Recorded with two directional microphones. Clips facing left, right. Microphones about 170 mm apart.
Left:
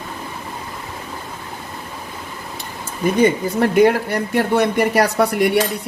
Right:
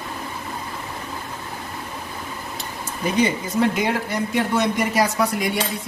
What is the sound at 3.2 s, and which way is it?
Speech, 60° left (ahead or behind).